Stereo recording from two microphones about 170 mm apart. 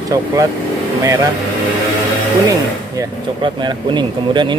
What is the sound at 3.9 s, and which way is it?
Speech, 25° right (ahead or behind).